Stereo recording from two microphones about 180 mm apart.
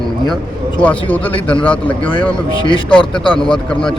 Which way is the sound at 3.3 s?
5° left (ahead or behind).